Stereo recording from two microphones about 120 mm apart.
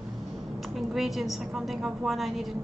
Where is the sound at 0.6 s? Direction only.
Centre (ahead or behind).